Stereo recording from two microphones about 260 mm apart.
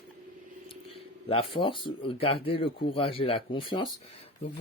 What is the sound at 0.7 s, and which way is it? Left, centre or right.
Speech, left.